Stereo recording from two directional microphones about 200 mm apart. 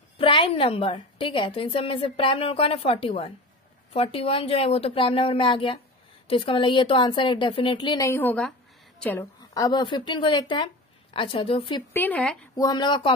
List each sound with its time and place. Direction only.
0.2 s a woman's voice: 25° left (ahead or behind)
11.9 s speech: 10° left (ahead or behind)
12.5 s a woman's voice: 20° left (ahead or behind)